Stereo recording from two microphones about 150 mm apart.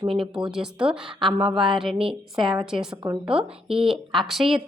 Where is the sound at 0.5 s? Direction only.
5° right (ahead or behind).